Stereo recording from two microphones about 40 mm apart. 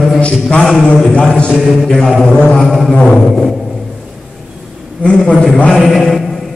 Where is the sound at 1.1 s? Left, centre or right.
Left.